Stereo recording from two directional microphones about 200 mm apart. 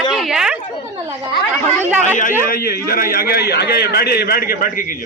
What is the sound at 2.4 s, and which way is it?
A man's voice, 45° left (ahead or behind).